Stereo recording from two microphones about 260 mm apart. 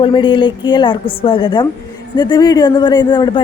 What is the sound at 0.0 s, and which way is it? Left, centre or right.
A woman's voice, centre.